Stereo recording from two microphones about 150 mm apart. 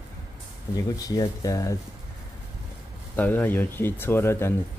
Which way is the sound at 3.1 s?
10° left (ahead or behind).